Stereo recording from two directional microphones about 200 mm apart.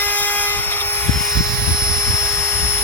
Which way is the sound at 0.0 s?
10° left (ahead or behind).